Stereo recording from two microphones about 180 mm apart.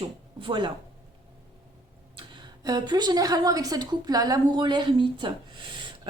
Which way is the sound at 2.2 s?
25° right (ahead or behind).